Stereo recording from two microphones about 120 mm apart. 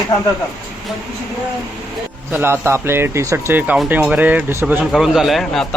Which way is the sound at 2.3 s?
20° right (ahead or behind).